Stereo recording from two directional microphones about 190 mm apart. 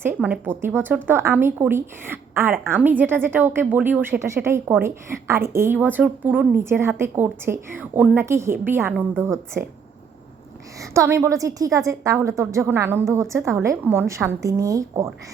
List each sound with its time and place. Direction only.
0.0 s a woman's voice: 10° right (ahead or behind)
10.8 s a woman's voice: 15° right (ahead or behind)